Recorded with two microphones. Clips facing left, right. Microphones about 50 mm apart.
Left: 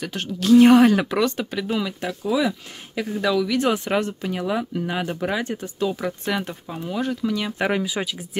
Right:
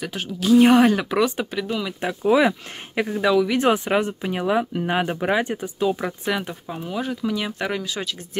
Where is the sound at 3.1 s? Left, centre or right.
Centre.